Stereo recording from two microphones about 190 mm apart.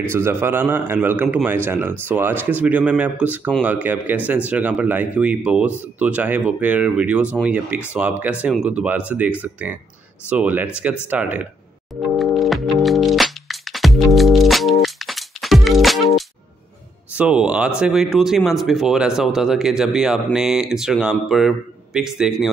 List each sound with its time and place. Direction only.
0.1 s a man's voice: 10° right (ahead or behind)
10.3 s a man's voice: 10° right (ahead or behind)
11.9 s music: centre (ahead or behind)
17.1 s speech: 5° right (ahead or behind)